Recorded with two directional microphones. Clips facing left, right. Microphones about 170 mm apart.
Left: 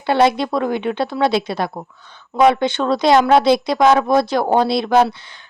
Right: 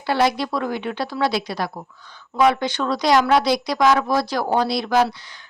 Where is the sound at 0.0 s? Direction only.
25° left (ahead or behind).